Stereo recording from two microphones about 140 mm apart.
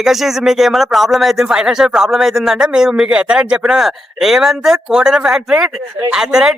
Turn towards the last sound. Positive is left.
turn(degrees=-5)  # may be behind; listen again after turning